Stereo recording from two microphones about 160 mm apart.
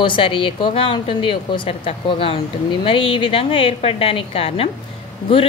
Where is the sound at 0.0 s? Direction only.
35° left (ahead or behind).